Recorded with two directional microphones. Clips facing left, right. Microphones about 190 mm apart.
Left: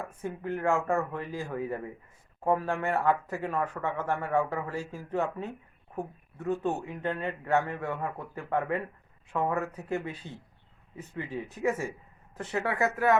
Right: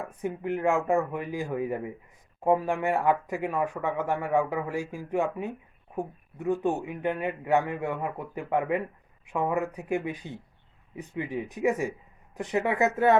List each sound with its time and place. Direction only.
0.0 s speech: 15° right (ahead or behind)